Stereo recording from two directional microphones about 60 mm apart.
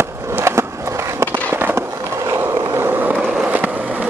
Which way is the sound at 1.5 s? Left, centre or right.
Right.